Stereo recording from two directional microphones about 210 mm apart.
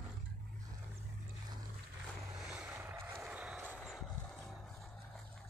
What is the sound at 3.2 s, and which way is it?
Vehicle, 5° right (ahead or behind).